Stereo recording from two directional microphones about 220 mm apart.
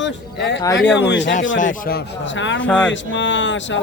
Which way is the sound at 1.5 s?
35° left (ahead or behind).